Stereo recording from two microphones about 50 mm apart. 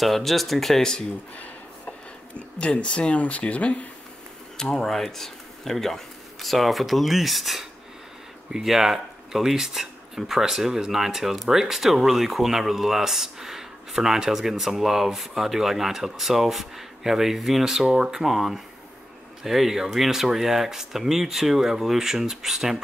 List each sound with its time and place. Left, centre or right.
0.0 s speech: centre
1.3 s speech: left
4.6 s speech: centre